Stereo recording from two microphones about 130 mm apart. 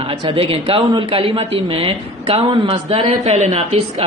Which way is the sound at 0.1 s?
45° right (ahead or behind).